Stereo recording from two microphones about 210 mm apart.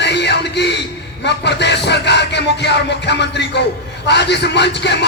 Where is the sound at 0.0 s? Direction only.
55° left (ahead or behind).